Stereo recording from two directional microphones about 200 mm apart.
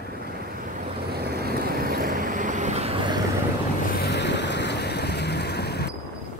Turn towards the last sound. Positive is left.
turn(degrees=55)  # may be behind; listen again after turning